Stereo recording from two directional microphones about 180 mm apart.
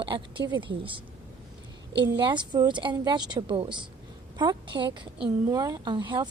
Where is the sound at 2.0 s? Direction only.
25° right (ahead or behind).